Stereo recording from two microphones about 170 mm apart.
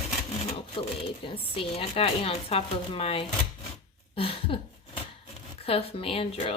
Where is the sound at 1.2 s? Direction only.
30° left (ahead or behind).